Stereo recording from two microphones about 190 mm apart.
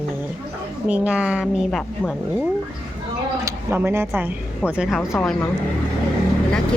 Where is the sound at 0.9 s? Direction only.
10° right (ahead or behind).